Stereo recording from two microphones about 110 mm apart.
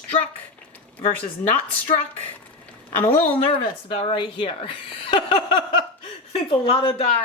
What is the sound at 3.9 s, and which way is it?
Speech, 55° left (ahead or behind).